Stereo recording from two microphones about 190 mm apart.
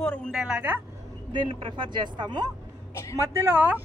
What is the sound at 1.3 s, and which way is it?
Speech, 25° right (ahead or behind).